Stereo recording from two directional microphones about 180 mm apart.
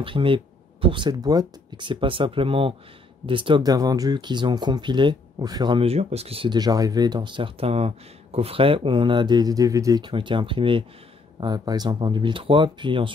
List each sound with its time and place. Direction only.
0.0 s speech: 30° right (ahead or behind)